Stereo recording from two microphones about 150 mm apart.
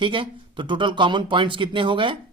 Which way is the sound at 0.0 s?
35° right (ahead or behind).